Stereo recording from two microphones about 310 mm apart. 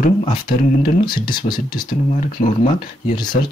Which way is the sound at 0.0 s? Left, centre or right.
Left.